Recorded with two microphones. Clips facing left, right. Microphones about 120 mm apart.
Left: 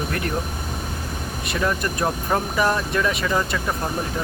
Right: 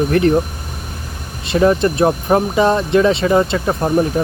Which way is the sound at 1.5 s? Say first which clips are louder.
Right 11 dB; 30° right (ahead or behind).